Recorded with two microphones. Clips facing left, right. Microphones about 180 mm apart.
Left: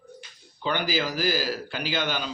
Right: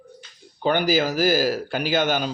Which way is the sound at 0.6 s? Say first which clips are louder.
Right 7 dB; 50° right (ahead or behind).